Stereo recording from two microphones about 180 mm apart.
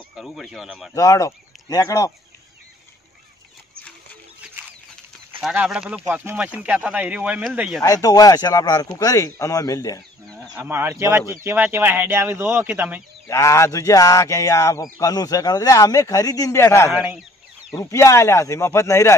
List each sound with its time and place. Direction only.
0.1 s speech: centre (ahead or behind)
0.9 s speech: 20° left (ahead or behind)
5.4 s speech: 5° right (ahead or behind)
7.8 s speech: 20° left (ahead or behind)
10.2 s speech: centre (ahead or behind)
13.3 s a sound: 15° left (ahead or behind)
15.0 s speech: 20° left (ahead or behind)
16.9 s chicken: 5° right (ahead or behind)
17.7 s a sound: 15° left (ahead or behind)